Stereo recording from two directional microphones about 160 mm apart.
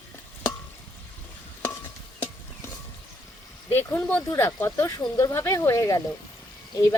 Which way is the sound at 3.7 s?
15° left (ahead or behind).